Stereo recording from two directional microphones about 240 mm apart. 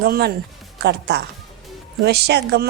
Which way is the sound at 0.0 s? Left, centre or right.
Right.